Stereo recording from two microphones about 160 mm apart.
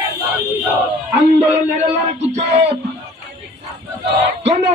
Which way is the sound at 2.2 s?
45° right (ahead or behind).